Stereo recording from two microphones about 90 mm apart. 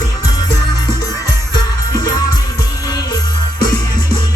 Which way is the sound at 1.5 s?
45° left (ahead or behind).